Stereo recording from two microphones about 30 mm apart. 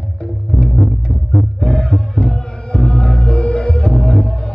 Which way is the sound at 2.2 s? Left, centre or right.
Left.